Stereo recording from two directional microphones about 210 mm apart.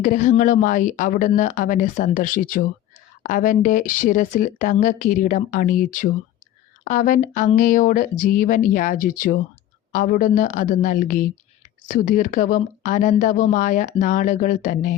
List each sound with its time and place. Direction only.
0.0 s speech: 40° left (ahead or behind)